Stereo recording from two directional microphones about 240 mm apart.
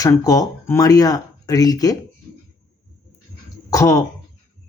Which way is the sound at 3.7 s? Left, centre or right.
Centre.